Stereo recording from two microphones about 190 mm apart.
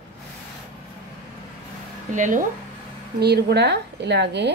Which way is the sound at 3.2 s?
60° right (ahead or behind).